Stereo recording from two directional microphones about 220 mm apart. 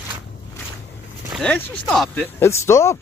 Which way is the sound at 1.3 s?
5° left (ahead or behind).